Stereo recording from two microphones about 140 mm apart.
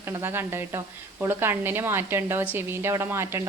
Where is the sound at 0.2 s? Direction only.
15° right (ahead or behind).